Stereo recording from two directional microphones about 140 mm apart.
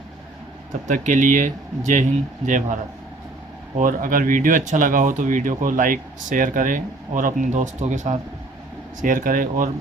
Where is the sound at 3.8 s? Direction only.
75° right (ahead or behind); by 8.1 s 60° right (ahead or behind).